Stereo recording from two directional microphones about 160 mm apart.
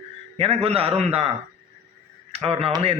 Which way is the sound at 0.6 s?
35° right (ahead or behind).